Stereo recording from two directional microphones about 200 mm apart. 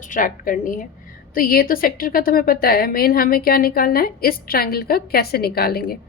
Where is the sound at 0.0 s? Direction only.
40° left (ahead or behind).